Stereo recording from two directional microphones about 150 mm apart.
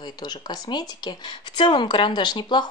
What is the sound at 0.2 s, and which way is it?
A woman's voice, 30° left (ahead or behind).